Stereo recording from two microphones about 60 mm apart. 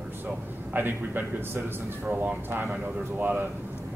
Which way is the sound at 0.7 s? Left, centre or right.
Right.